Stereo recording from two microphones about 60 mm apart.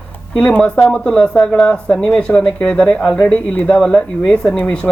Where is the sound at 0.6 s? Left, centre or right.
Centre.